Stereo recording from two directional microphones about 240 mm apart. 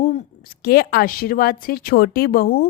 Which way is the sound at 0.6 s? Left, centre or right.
Left.